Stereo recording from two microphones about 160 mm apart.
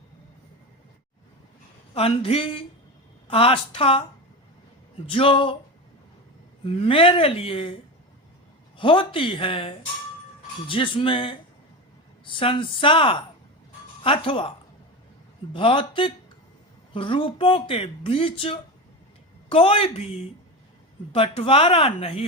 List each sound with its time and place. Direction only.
1.9 s speech: 35° left (ahead or behind)
6.7 s speech: 35° left (ahead or behind)
8.8 s speech: 35° left (ahead or behind)
15.5 s speech: 35° left (ahead or behind)